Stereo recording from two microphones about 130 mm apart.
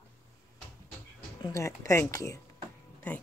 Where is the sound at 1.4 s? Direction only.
25° left (ahead or behind).